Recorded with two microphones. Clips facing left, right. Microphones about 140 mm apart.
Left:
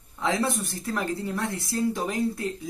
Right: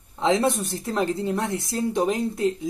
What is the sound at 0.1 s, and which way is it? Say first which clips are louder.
A woman's voice: right 5 dB; 20° right (ahead or behind).